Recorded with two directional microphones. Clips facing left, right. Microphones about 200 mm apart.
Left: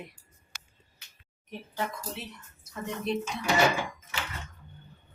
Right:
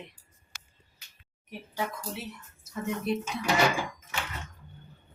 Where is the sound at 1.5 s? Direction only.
10° right (ahead or behind).